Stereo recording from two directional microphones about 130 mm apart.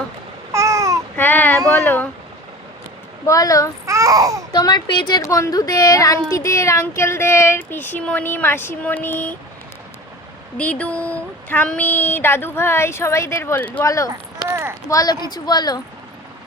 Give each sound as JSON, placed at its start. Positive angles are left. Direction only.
{"t": 0.5, "sound": "babbling", "side_deg": -25}
{"t": 1.1, "sound": "child singing", "side_deg": 15}
{"t": 1.8, "sound": "a sound", "side_deg": 15}
{"t": 3.2, "sound": "a woman's voice", "side_deg": 25}
{"t": 3.8, "sound": "speech", "side_deg": -25}
{"t": 4.5, "sound": "a woman's voice", "side_deg": 30}
{"t": 10.6, "sound": "speech", "side_deg": 10}
{"t": 13.8, "sound": "a woman's voice", "side_deg": 25}
{"t": 14.4, "sound": "clip-clop", "side_deg": -20}
{"t": 14.8, "sound": "a woman's voice", "side_deg": 30}